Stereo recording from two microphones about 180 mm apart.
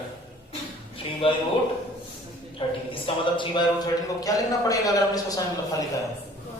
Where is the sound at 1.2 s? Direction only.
30° left (ahead or behind).